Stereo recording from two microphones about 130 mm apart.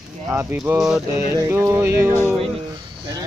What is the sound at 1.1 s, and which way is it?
Music, 20° right (ahead or behind).